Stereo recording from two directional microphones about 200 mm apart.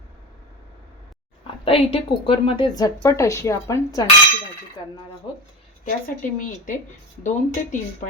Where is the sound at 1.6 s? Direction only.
30° left (ahead or behind).